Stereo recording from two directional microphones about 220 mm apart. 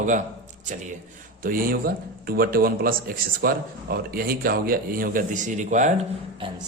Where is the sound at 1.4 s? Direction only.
40° right (ahead or behind).